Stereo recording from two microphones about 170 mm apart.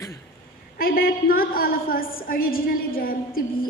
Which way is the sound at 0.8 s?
60° left (ahead or behind).